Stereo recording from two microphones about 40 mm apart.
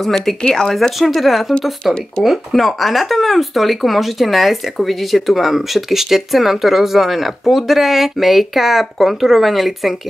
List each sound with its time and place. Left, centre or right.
0.0 s speech: centre
0.4 s speech: centre
0.9 s speech: centre